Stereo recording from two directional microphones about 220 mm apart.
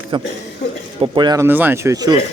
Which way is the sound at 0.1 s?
20° right (ahead or behind).